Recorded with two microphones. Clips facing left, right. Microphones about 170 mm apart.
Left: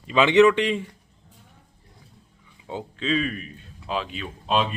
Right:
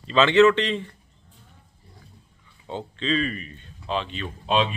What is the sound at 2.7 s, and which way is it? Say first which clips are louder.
Speech: even; 5° left (ahead or behind).